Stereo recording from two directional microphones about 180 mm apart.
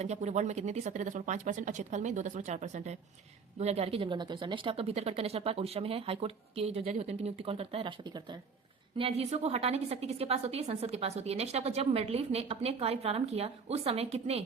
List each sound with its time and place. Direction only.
0.0 s a woman's voice: 40° right (ahead or behind)